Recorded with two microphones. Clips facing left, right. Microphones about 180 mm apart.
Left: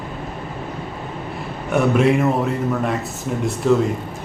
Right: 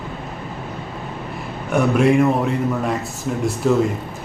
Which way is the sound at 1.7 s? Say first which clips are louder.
Right 1 dB; centre (ahead or behind).